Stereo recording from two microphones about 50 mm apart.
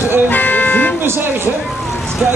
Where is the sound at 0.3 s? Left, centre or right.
Left.